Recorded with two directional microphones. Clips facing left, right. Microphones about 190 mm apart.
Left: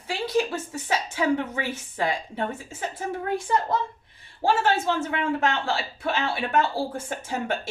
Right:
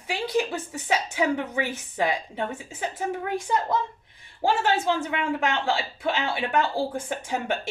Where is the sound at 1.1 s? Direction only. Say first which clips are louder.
Left 1 dB; 15° right (ahead or behind).